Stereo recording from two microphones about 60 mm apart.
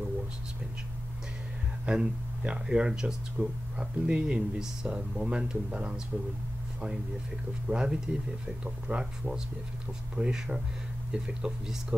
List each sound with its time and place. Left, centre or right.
1.9 s speech: centre
7.6 s speech: centre